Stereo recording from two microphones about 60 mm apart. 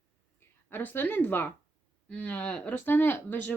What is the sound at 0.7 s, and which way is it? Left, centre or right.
Speech, left.